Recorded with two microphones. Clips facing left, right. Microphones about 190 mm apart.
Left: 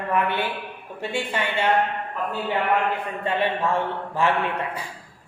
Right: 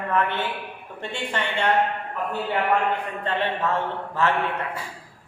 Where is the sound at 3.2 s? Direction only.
10° left (ahead or behind).